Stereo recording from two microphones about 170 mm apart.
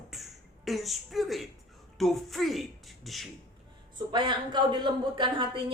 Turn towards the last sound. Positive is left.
turn(degrees=-30)  # may be behind; listen again after turning